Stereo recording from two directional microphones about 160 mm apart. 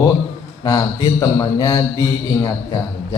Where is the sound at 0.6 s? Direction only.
30° left (ahead or behind).